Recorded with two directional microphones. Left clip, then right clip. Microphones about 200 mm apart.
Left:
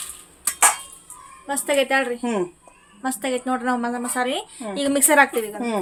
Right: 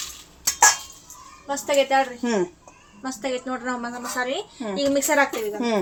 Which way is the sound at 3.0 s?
55° left (ahead or behind).